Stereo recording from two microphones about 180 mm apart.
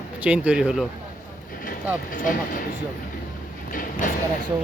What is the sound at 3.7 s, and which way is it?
Speech, 50° left (ahead or behind).